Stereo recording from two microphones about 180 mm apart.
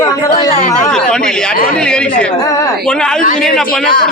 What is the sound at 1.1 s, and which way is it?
A man's voice, 5° left (ahead or behind).